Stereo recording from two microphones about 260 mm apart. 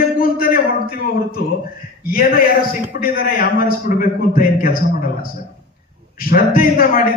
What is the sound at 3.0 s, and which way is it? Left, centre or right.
A man's voice, left.